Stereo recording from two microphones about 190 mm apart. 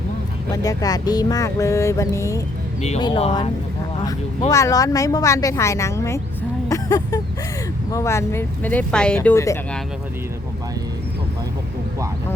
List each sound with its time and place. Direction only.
0.5 s speech: 20° left (ahead or behind)
3.0 s speech: 30° left (ahead or behind)
4.0 s speech: 15° left (ahead or behind)
6.7 s vehicle: 20° left (ahead or behind)
7.9 s speech: 15° left (ahead or behind)